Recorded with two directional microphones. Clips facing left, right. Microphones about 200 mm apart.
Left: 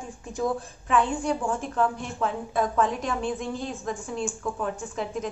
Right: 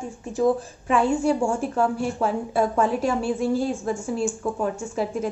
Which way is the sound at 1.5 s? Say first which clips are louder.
Right 3 dB; 10° right (ahead or behind).